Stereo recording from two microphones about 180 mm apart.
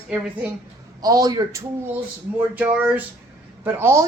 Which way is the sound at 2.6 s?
10° right (ahead or behind).